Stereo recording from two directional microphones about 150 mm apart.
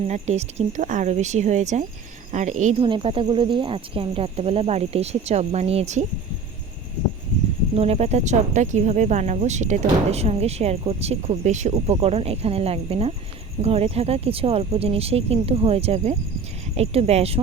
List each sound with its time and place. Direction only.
0.1 s speech: 45° right (ahead or behind)
2.8 s speech: 35° right (ahead or behind); by 6.1 s 50° right (ahead or behind)
7.8 s speech: 45° right (ahead or behind)